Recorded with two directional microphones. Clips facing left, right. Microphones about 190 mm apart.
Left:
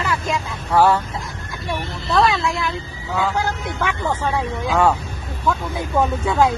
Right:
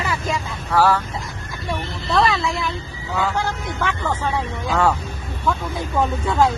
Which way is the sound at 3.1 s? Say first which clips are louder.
Left 1 dB; 10° left (ahead or behind).